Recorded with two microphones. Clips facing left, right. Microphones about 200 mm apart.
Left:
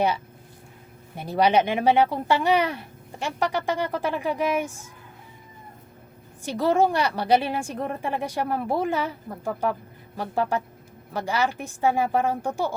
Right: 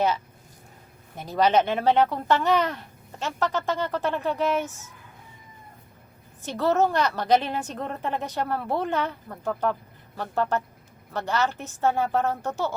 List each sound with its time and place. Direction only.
1.1 s speech: 10° left (ahead or behind)
6.4 s speech: 10° left (ahead or behind)